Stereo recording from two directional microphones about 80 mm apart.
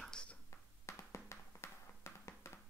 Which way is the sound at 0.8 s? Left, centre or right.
Left.